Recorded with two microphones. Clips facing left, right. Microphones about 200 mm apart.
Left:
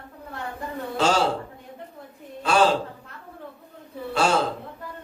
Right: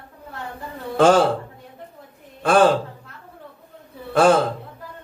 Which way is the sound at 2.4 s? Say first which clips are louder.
Right 5 dB; 55° right (ahead or behind).